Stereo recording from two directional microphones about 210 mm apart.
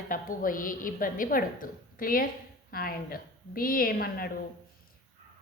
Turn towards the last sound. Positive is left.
turn(degrees=45)  # may be behind; listen again after turning